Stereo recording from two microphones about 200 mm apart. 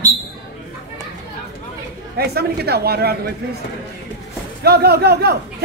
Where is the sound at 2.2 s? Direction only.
50° right (ahead or behind).